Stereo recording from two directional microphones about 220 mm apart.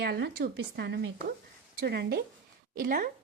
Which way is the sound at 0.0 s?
45° right (ahead or behind).